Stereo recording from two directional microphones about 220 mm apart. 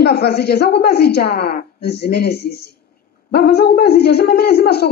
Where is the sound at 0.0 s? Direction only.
45° left (ahead or behind).